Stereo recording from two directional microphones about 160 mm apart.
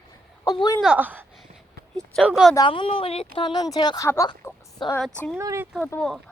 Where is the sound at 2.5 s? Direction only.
30° left (ahead or behind).